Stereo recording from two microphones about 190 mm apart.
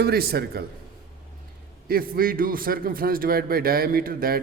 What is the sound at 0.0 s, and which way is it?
Speech, 55° right (ahead or behind).